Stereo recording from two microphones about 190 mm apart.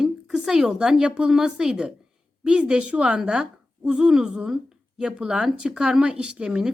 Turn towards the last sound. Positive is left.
turn(degrees=-5)  # may be behind; listen again after turning